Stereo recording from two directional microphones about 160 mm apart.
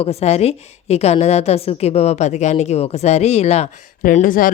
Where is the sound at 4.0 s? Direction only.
55° left (ahead or behind).